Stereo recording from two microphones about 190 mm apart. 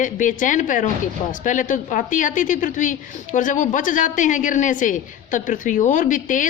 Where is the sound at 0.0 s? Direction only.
45° left (ahead or behind).